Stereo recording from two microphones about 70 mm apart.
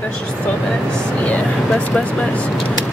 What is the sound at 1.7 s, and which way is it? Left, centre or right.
Speech, centre.